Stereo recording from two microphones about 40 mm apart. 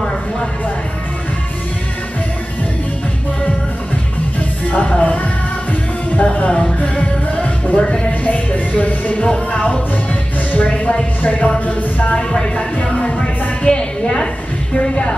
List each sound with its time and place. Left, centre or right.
4.6 s music: left
6.2 s music: left
7.8 s music: left
8.2 s music: left
11.2 s speech: left
12.2 s speech: left
13.2 s music: centre